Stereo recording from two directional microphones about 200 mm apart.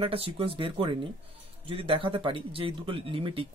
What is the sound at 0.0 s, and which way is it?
Speech, 30° right (ahead or behind).